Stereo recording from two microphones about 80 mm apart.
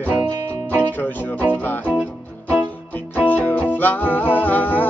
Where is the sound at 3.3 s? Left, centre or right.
Left.